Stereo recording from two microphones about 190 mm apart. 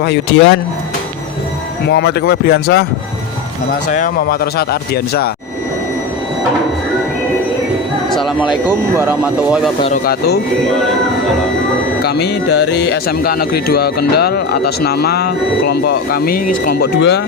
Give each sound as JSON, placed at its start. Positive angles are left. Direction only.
{"t": 0.0, "sound": "speech", "side_deg": 70}
{"t": 1.9, "sound": "speech", "side_deg": 60}
{"t": 3.8, "sound": "speech", "side_deg": 45}
{"t": 8.1, "sound": "speech", "side_deg": 0}
{"t": 10.0, "sound": "speech", "side_deg": 55}
{"t": 12.0, "sound": "speech", "side_deg": 60}